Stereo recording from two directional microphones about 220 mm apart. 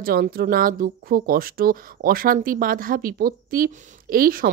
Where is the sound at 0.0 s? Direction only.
45° right (ahead or behind).